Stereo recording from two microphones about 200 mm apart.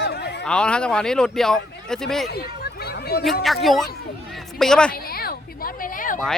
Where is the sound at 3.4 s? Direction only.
Centre (ahead or behind).